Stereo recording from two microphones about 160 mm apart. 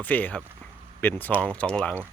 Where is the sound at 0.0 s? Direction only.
10° left (ahead or behind).